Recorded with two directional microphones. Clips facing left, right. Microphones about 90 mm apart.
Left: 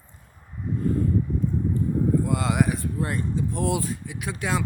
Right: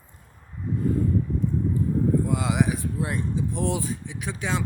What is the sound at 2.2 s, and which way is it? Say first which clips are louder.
Speech: left 1 dB; centre (ahead or behind).